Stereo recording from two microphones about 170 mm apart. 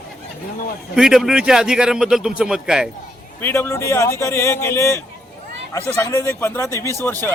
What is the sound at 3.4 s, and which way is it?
A man's voice, 10° left (ahead or behind).